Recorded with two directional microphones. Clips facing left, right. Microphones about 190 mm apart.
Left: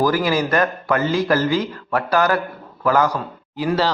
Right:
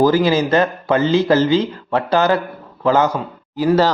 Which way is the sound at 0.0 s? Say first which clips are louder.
Right 4 dB; 25° right (ahead or behind).